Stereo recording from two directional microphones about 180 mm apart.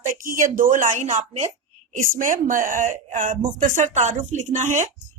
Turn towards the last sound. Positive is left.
turn(degrees=-45)  # may be behind; listen again after turning